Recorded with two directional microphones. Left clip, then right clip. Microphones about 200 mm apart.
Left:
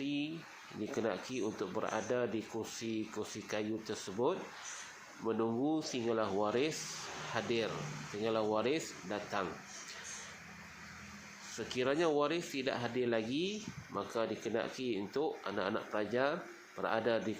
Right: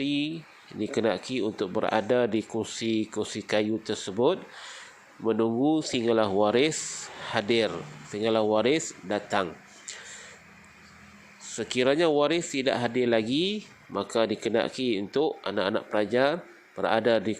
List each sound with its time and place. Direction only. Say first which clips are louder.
0.0 s a sound: right 10 dB; 30° right (ahead or behind)
0.8 s speech: right 10 dB; 30° right (ahead or behind)
5.2 s speech: right 10 dB; 30° right (ahead or behind)
11.4 s speech: right 10 dB; 30° right (ahead or behind)